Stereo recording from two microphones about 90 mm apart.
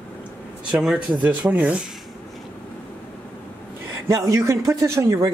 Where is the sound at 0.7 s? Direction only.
10° right (ahead or behind).